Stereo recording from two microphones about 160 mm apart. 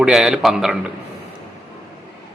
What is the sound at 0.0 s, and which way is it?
Speech, 5° right (ahead or behind).